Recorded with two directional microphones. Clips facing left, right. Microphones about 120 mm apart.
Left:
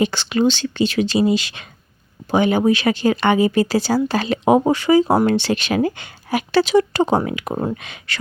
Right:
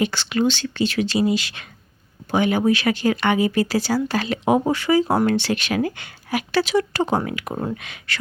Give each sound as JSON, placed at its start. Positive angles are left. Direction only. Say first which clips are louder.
{"t": 0.0, "sound": "speech", "louder": "left 3 dB", "side_deg": 25}